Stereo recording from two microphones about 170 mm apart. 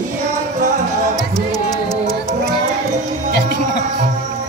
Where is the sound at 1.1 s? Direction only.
20° left (ahead or behind).